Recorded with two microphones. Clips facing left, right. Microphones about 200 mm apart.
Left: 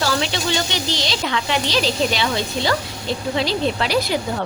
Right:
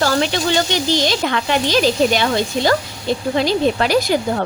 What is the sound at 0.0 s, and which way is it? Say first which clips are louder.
Speech: right 4 dB; 50° right (ahead or behind).